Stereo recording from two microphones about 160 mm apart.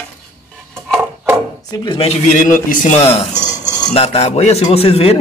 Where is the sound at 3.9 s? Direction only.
40° left (ahead or behind).